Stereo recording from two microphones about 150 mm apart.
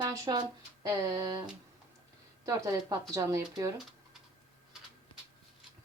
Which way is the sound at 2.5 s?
20° right (ahead or behind).